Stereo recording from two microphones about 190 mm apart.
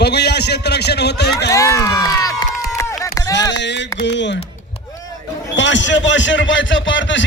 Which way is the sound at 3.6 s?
65° left (ahead or behind).